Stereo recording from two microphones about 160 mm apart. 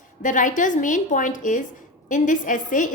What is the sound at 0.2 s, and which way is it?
A woman's voice, 55° left (ahead or behind).